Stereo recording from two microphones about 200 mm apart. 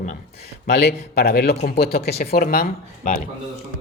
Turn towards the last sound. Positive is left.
turn(degrees=45)  # may be behind; listen again after turning